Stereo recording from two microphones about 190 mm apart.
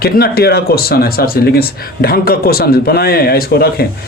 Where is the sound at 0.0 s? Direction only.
55° left (ahead or behind).